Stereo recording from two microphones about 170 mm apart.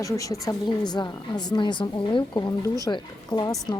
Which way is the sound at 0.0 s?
20° left (ahead or behind).